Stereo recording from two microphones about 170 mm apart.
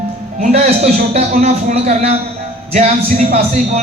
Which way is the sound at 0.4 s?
40° right (ahead or behind).